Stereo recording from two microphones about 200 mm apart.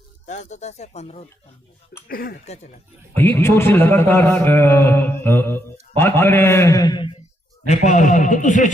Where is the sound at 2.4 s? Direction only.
35° left (ahead or behind).